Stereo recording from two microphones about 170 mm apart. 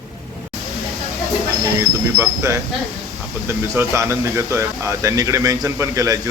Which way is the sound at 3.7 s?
15° right (ahead or behind).